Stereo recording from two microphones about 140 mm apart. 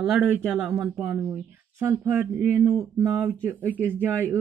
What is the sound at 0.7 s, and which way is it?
Speech, 10° right (ahead or behind).